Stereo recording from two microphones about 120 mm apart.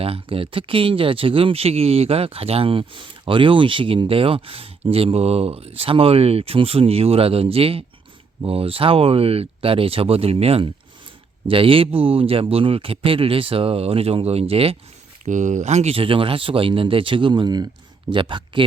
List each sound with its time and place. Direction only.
0.0 s speech: 50° right (ahead or behind)
15.2 s speech: 90° right; by 18.6 s 45° right (ahead or behind)